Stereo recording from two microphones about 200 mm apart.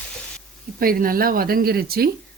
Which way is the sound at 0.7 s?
45° right (ahead or behind).